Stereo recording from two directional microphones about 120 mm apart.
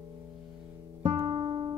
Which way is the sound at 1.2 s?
45° right (ahead or behind).